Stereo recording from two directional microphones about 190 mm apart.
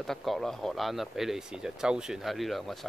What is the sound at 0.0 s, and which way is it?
Speech, centre (ahead or behind).